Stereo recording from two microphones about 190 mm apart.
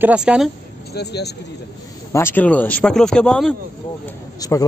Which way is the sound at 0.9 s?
60° left (ahead or behind).